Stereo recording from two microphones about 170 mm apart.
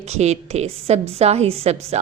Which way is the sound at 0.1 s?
40° right (ahead or behind).